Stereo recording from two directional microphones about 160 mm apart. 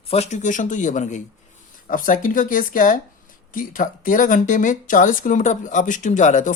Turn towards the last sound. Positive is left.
turn(degrees=50)  # may be behind; listen again after turning